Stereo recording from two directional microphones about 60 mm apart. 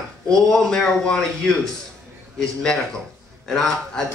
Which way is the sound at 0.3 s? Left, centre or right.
Centre.